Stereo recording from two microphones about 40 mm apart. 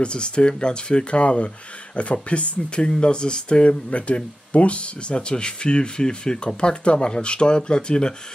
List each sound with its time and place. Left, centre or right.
0.0 s speech: left